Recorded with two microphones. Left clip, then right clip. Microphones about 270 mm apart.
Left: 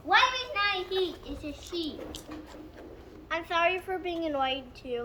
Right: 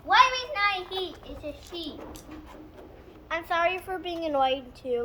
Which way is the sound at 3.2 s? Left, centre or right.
Right.